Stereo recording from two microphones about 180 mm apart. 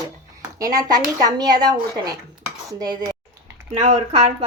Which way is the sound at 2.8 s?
20° right (ahead or behind).